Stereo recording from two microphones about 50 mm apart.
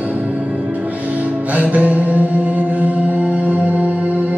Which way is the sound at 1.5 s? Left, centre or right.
Right.